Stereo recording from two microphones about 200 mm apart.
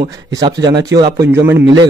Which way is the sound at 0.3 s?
20° right (ahead or behind).